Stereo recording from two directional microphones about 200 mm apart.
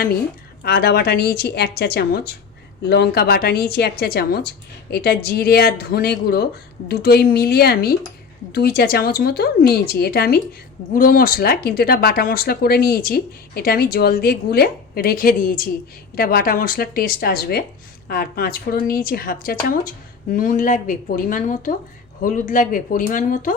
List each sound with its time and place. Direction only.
0.6 s speech: 50° left (ahead or behind)